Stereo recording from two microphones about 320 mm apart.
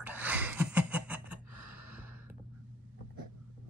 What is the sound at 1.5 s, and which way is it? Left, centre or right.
Gasp, right.